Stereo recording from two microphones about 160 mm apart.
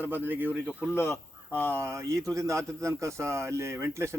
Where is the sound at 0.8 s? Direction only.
15° left (ahead or behind).